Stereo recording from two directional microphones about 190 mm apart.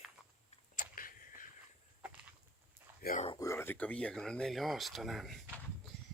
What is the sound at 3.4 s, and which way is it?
Speech, 15° left (ahead or behind).